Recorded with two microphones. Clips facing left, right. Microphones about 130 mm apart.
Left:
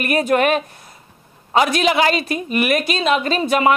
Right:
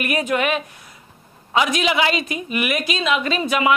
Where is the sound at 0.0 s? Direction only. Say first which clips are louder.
Left 4 dB; 40° left (ahead or behind).